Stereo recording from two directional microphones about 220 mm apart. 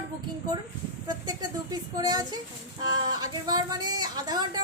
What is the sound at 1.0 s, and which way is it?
A woman's voice, 20° right (ahead or behind).